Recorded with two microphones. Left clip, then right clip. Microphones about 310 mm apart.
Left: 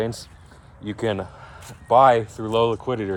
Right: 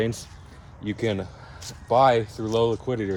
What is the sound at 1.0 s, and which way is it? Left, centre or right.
Speech, left.